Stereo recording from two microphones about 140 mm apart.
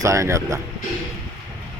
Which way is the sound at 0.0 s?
20° right (ahead or behind).